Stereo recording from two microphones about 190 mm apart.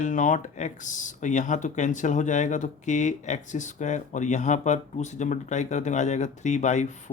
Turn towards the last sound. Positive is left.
turn(degrees=40)  # may be behind; listen again after turning